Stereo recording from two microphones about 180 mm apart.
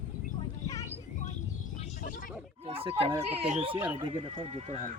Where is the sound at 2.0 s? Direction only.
50° left (ahead or behind).